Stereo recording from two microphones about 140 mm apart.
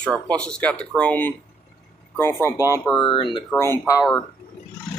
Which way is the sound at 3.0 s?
35° left (ahead or behind).